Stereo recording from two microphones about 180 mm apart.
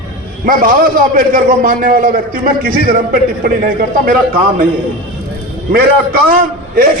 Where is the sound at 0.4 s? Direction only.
50° right (ahead or behind).